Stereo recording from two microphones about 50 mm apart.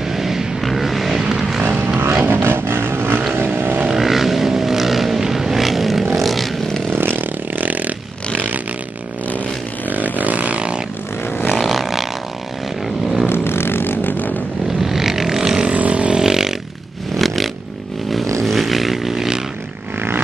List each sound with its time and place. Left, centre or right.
0.1 s vehicle: centre
2.2 s vehicle: right
3.5 s vehicle: right
3.9 s vehicle: centre
6.9 s vehicle: right
9.8 s a sound: right
11.4 s vehicle: centre
13.3 s vehicle: left
14.9 s vehicle: centre
15.7 s vehicle: right
16.2 s vehicle: centre
18.4 s a sound: centre